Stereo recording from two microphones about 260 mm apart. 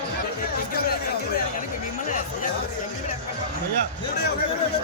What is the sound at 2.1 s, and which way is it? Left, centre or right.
Music, left.